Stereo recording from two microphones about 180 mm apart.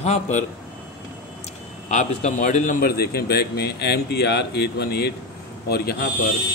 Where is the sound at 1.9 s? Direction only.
40° left (ahead or behind); by 6.1 s 60° left (ahead or behind).